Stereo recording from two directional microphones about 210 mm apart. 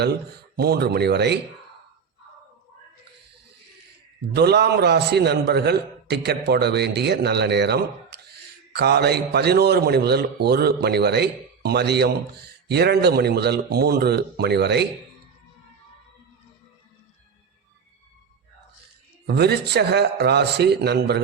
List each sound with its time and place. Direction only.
0.5 s a man's voice: 50° right (ahead or behind)
4.4 s a man's voice: 50° right (ahead or behind)
19.3 s a man's voice: 50° right (ahead or behind)